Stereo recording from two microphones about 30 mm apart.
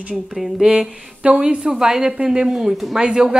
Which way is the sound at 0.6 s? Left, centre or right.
Right.